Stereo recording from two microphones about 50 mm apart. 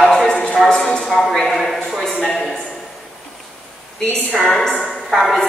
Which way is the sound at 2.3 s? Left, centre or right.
Centre.